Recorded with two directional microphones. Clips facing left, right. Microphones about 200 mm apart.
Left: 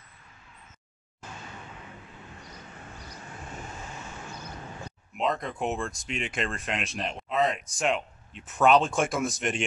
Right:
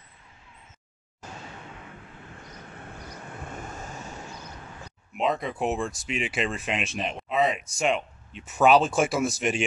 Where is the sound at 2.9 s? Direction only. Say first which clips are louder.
Right 4 dB; 50° right (ahead or behind).